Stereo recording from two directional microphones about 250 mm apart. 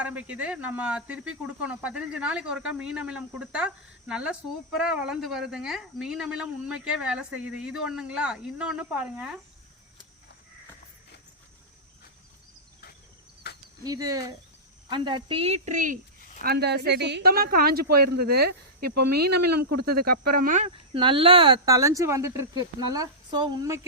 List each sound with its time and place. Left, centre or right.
0.0 s speech: centre
13.5 s cricket: left
13.8 s a woman's voice: centre